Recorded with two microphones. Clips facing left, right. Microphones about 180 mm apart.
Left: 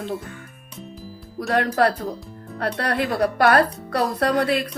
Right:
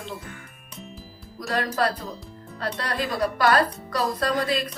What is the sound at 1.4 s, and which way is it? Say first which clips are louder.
Speech: left 5 dB; 65° left (ahead or behind).